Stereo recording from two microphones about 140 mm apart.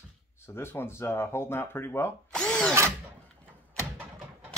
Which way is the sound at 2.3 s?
5° left (ahead or behind).